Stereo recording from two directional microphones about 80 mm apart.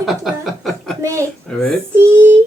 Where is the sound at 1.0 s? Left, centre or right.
Right.